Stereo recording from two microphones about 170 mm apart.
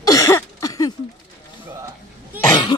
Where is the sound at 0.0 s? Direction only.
20° left (ahead or behind).